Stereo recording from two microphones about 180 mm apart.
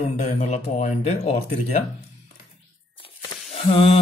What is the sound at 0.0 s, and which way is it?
A man's voice, 40° left (ahead or behind).